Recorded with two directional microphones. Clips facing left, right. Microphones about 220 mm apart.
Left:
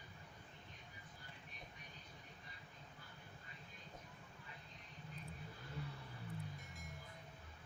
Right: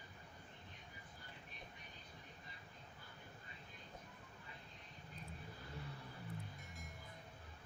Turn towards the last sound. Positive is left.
turn(degrees=0)  # may be behind; listen again after turning